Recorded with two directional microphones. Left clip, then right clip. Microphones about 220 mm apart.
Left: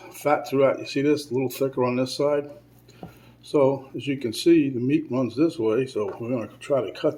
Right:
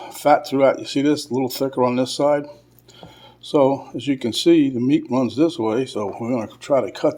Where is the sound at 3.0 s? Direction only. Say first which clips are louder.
Even; centre (ahead or behind).